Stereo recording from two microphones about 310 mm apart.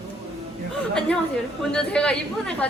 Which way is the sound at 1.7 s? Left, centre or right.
Centre.